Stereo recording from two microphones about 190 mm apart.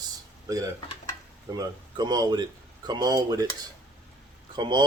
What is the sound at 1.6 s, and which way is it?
Speech, 20° right (ahead or behind).